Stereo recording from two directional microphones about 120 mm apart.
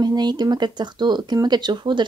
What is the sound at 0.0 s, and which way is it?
Speech, 35° right (ahead or behind).